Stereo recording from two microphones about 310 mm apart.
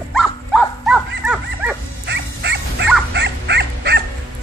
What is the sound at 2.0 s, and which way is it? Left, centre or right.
Dog, right.